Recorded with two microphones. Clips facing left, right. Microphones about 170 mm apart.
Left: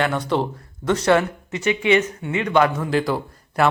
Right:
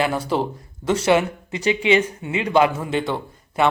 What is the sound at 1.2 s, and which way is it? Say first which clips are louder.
Speech: even; 30° right (ahead or behind).